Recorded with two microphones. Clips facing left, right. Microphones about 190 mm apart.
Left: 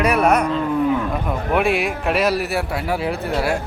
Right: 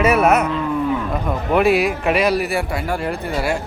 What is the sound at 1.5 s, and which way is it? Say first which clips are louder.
Speech: right 4 dB; centre (ahead or behind).